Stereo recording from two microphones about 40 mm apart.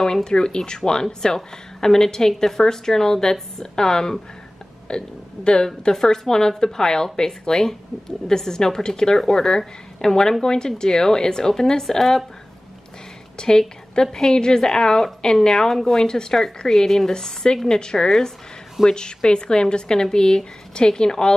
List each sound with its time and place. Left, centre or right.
0.0 s a woman's voice: centre
13.4 s a woman's voice: centre